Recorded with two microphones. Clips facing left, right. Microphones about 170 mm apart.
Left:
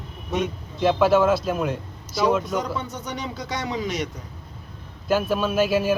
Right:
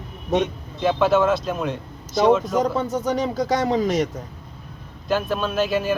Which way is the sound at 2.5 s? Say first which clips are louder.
Right 6 dB; 45° right (ahead or behind).